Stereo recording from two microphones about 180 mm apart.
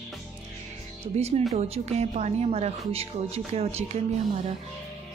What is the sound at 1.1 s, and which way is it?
Speech, 35° right (ahead or behind).